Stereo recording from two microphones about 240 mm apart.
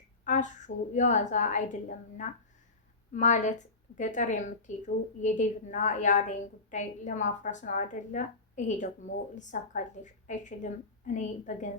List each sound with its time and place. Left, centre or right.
0.3 s a woman's voice: left